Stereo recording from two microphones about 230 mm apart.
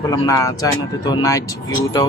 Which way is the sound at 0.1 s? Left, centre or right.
Centre.